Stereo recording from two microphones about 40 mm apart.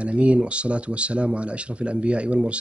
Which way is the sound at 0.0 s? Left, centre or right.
Right.